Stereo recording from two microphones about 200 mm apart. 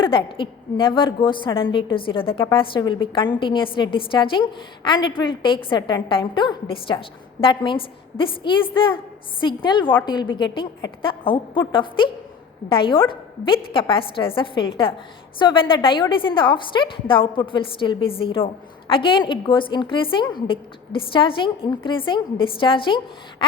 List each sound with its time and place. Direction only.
0.0 s a woman's voice: 25° left (ahead or behind)